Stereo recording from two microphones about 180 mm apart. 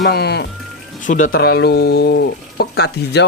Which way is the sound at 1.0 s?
45° left (ahead or behind).